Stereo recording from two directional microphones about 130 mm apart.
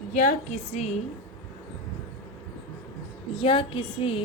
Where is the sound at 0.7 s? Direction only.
60° left (ahead or behind).